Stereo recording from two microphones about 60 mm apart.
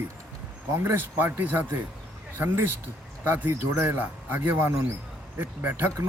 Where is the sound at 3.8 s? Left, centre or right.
Right.